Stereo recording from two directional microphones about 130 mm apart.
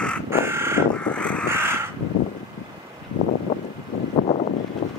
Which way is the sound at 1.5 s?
20° right (ahead or behind).